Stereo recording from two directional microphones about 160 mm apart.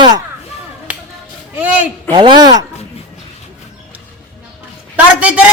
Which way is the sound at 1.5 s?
10° right (ahead or behind).